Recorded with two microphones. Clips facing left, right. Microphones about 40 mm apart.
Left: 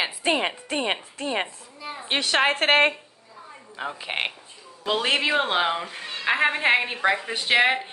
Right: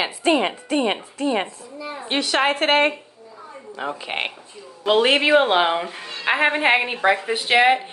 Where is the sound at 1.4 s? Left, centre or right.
Centre.